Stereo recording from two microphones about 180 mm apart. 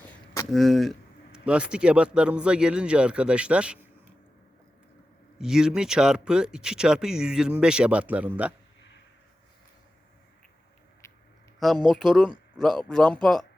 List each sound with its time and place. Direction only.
0.5 s speech: centre (ahead or behind)
5.4 s speech: 5° right (ahead or behind)
11.0 s a sound: 15° left (ahead or behind)
11.9 s speech: centre (ahead or behind)